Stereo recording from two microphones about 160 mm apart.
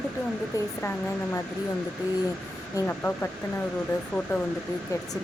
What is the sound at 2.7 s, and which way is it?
Speech, 10° left (ahead or behind).